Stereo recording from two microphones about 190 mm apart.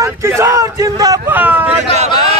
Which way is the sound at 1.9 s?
35° right (ahead or behind).